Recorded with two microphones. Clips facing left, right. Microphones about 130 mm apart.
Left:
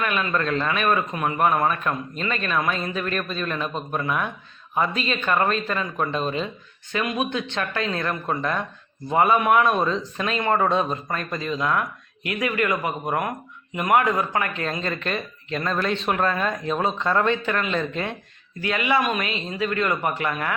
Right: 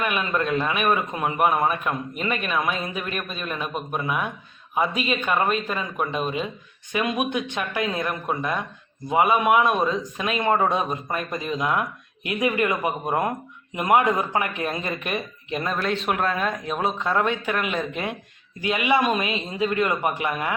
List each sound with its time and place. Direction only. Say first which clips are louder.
0.0 s a man's voice: even; 20° right (ahead or behind)
6.9 s a man's voice: right 1 dB; 20° right (ahead or behind)
15.7 s a man's voice: left 1 dB; 5° right (ahead or behind)